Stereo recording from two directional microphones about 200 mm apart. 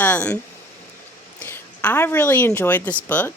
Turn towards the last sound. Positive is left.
turn(degrees=10)  # may be behind; listen again after turning